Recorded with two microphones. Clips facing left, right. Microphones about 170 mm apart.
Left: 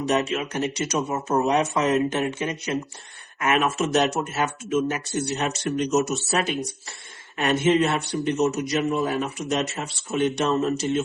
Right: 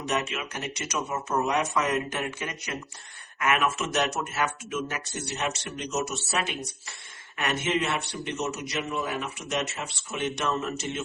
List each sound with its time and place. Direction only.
0.0 s a man's voice: 30° left (ahead or behind)